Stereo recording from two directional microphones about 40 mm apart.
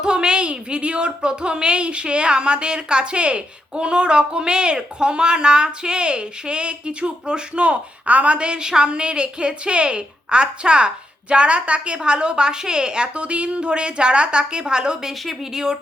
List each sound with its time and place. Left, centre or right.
0.0 s a woman's voice: right